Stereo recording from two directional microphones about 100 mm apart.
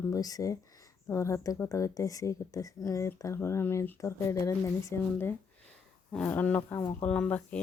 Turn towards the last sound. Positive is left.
turn(degrees=15)  # may be behind; listen again after turning